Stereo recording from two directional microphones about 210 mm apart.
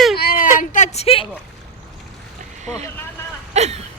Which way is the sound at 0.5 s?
35° left (ahead or behind).